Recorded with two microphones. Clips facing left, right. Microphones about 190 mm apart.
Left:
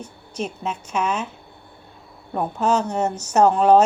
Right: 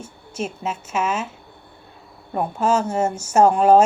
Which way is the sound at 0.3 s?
5° right (ahead or behind).